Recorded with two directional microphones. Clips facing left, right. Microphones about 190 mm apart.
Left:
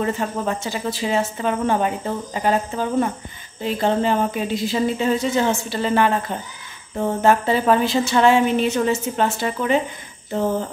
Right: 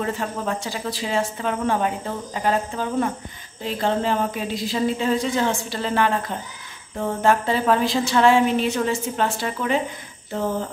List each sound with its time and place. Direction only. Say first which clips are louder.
0.0 s a woman's voice: left 3 dB; centre (ahead or behind)